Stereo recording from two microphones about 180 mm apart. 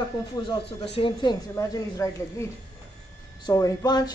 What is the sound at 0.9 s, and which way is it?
A woman's voice, 25° left (ahead or behind).